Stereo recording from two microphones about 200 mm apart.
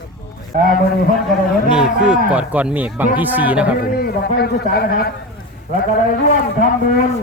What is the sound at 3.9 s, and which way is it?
A man's voice, 50° left (ahead or behind).